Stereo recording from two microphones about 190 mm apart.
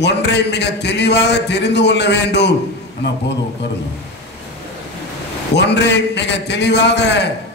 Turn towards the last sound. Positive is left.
turn(degrees=65)  # may be behind; listen again after turning